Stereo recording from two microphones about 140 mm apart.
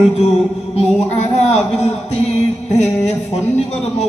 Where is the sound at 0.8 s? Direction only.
50° left (ahead or behind).